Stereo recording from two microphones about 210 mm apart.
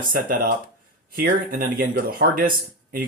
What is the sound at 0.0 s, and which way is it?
Speech, 40° right (ahead or behind).